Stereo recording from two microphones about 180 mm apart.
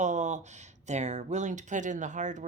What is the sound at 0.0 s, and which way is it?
Speech, 40° right (ahead or behind).